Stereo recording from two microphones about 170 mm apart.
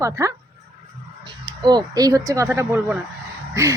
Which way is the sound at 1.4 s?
25° right (ahead or behind).